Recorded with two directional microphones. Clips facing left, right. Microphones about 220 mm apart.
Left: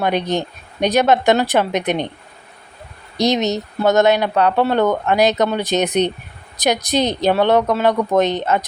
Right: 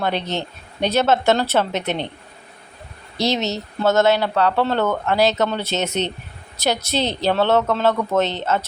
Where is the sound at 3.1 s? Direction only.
15° left (ahead or behind).